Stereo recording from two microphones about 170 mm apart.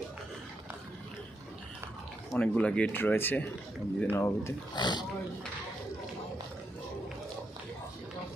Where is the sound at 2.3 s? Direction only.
5° left (ahead or behind); by 5.1 s 25° left (ahead or behind).